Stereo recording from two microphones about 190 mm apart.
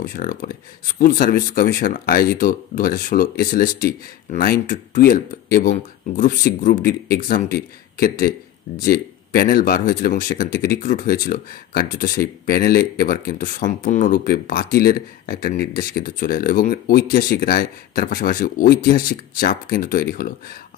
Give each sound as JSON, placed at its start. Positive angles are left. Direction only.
{"t": 0.0, "sound": "speech", "side_deg": 45}